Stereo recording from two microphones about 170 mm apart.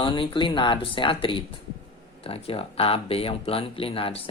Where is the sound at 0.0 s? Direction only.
30° left (ahead or behind).